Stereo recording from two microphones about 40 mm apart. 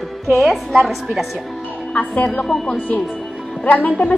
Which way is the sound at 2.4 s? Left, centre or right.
Centre.